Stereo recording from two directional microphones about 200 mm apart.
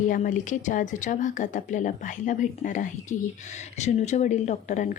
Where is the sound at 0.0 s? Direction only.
40° left (ahead or behind).